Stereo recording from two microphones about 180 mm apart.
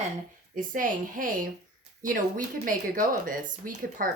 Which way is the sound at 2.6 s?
50° right (ahead or behind).